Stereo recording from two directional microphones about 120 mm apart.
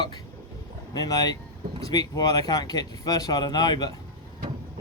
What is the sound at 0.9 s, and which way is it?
Speech, 35° left (ahead or behind).